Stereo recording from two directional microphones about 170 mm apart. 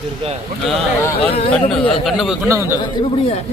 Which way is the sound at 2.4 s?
15° right (ahead or behind).